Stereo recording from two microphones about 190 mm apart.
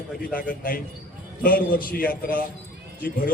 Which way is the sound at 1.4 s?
45° left (ahead or behind).